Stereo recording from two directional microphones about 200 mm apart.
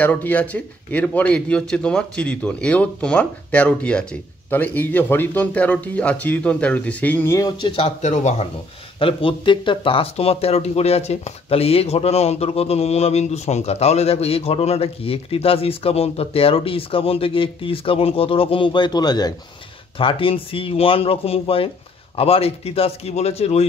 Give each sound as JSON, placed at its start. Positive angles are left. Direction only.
{"t": 0.0, "sound": "speech", "side_deg": 10}
{"t": 9.0, "sound": "a man's voice", "side_deg": 25}